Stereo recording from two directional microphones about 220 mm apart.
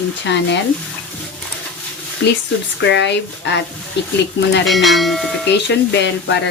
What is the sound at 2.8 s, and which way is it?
Speech, 55° left (ahead or behind).